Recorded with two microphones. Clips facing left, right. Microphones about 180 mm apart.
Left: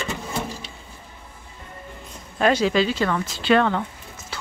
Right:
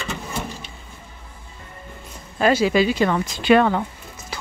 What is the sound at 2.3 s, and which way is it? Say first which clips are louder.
Speech: right 2 dB; 5° right (ahead or behind).